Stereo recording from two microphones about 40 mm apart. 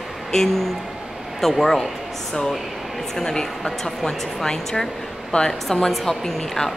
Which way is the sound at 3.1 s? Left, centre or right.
Centre.